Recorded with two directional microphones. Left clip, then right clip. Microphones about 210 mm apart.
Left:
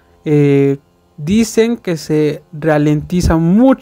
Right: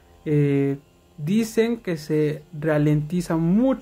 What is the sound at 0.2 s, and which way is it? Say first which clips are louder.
Speech: left 11 dB; 40° left (ahead or behind).